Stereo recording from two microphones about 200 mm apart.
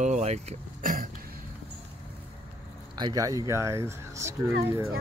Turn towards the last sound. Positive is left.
turn(degrees=-15)  # may be behind; listen again after turning